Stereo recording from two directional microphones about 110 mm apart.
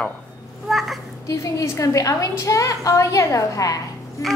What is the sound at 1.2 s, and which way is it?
A woman's voice, 30° left (ahead or behind).